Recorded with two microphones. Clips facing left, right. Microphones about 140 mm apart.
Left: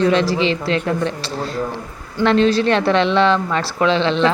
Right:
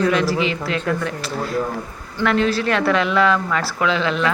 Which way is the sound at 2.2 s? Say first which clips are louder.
Left 4 dB; 25° left (ahead or behind).